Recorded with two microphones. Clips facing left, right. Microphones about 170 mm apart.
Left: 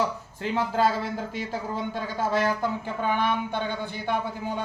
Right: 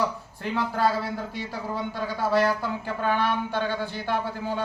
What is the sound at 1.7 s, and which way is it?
Speech, 20° left (ahead or behind).